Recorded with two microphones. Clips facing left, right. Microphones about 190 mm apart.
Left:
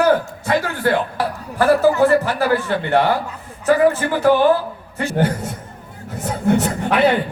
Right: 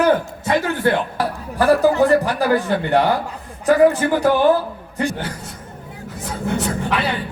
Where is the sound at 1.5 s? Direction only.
15° right (ahead or behind).